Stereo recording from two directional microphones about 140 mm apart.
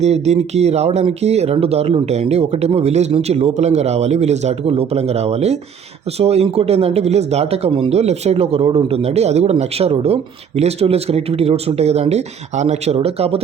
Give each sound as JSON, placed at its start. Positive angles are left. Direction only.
{"t": 0.0, "sound": "speech", "side_deg": -50}